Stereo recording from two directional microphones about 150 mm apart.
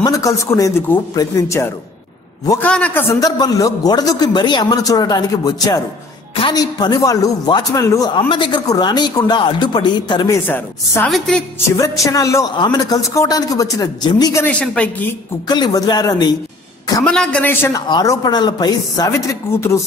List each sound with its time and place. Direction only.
0.0 s a man's voice: 20° left (ahead or behind)
2.6 s a man's voice: 10° left (ahead or behind)
8.2 s a man's voice: 35° left (ahead or behind)
10.4 s a man's voice: 15° left (ahead or behind)
11.1 s a woman's voice: centre (ahead or behind)
11.7 s a man's voice: 20° left (ahead or behind)
14.4 s a man's voice: 10° left (ahead or behind)
15.4 s a man's voice: 25° left (ahead or behind)
17.0 s a man's voice: 5° left (ahead or behind)
17.8 s a man's voice: 25° left (ahead or behind)